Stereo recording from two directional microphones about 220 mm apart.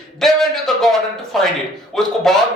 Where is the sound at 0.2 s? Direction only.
Centre (ahead or behind).